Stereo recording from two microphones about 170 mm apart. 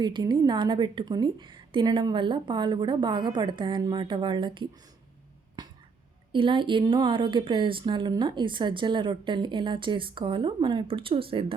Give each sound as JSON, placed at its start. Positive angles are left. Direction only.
{"t": 0.0, "sound": "a woman's voice", "side_deg": -25}
{"t": 5.6, "sound": "finger snapping", "side_deg": -25}
{"t": 6.3, "sound": "a woman's voice", "side_deg": -30}